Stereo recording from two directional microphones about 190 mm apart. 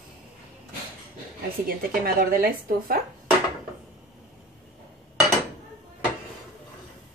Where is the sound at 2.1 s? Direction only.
50° right (ahead or behind).